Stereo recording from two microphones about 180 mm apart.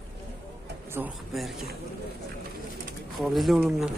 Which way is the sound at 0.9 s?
10° right (ahead or behind).